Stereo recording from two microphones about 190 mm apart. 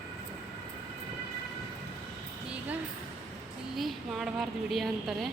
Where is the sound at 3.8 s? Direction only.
Centre (ahead or behind).